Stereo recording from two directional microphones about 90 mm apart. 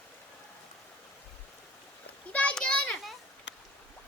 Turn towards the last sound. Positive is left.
turn(degrees=10)  # may be behind; listen again after turning